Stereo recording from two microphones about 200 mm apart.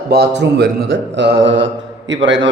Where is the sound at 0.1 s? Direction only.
50° right (ahead or behind).